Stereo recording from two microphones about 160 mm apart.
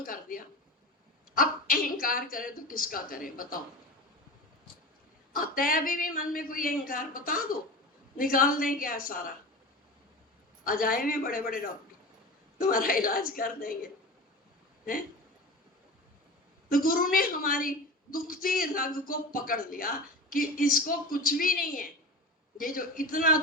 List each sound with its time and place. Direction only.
0.0 s a sound: 60° left (ahead or behind)
1.4 s a woman's voice: 60° left (ahead or behind)
5.3 s a woman's voice: 60° left (ahead or behind)
10.6 s a woman's voice: 60° left (ahead or behind)
16.6 s a woman's voice: 60° left (ahead or behind)